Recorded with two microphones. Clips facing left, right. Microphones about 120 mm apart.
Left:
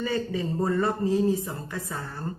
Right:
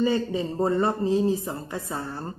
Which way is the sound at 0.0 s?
20° right (ahead or behind).